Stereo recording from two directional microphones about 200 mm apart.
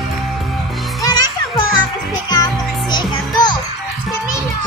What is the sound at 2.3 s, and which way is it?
Music, 20° left (ahead or behind).